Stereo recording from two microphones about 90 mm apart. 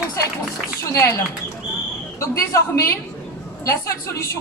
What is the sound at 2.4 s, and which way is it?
A woman's voice, 30° left (ahead or behind).